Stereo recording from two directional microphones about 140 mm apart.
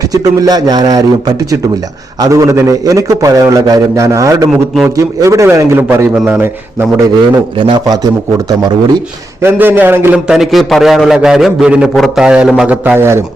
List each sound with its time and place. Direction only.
0.1 s a man's voice: 25° right (ahead or behind)
2.2 s a man's voice: 25° right (ahead or behind)
9.4 s a man's voice: 15° right (ahead or behind)